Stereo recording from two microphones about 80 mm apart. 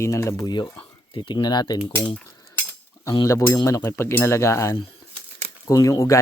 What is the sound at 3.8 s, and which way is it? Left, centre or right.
Speech, left.